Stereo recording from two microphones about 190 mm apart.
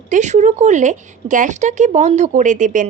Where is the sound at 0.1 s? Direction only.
40° right (ahead or behind).